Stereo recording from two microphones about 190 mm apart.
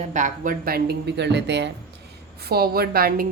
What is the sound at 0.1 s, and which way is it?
A woman's voice, 40° right (ahead or behind).